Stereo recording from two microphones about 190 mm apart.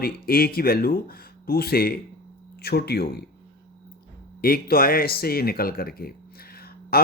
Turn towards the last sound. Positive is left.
turn(degrees=55)  # may be behind; listen again after turning